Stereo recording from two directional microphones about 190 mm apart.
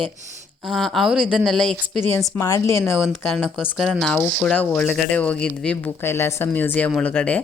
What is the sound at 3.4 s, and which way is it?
Speech, 5° right (ahead or behind).